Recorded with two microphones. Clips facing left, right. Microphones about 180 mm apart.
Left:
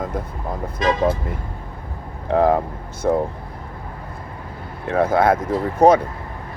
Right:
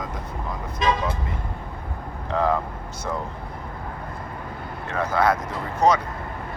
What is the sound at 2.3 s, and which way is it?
Speech, 55° left (ahead or behind).